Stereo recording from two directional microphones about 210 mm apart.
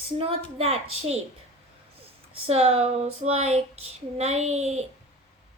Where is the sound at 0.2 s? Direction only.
25° right (ahead or behind).